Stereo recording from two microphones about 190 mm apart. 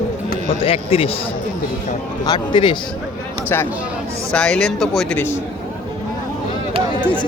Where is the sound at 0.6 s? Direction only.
30° left (ahead or behind).